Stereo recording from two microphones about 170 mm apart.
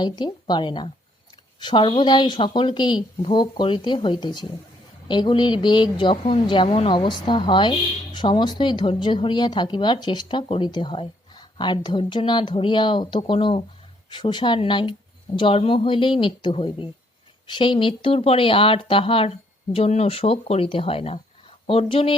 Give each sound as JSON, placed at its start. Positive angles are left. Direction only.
{"t": 0.0, "sound": "speech", "side_deg": 25}